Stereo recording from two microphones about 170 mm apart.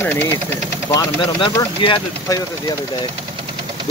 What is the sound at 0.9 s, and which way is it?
Speech, 25° left (ahead or behind).